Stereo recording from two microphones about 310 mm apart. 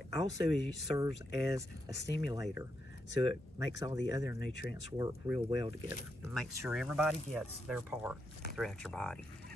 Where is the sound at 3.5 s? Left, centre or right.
Centre.